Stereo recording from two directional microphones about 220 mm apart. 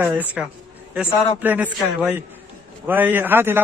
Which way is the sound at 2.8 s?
10° right (ahead or behind).